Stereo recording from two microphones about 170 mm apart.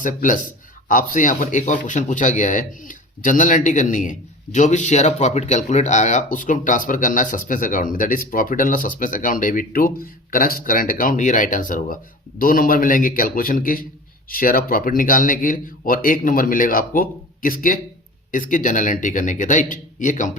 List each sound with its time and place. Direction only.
0.0 s speech: 50° left (ahead or behind)